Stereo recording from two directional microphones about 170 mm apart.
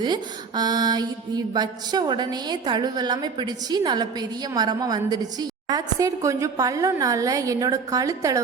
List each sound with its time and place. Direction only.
0.0 s mantra: 25° right (ahead or behind)